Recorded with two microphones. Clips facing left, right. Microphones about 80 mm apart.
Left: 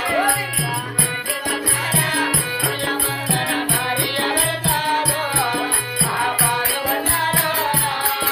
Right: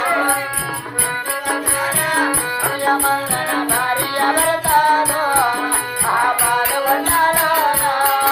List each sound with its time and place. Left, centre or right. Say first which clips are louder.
3.5 s music: right 4 dB; right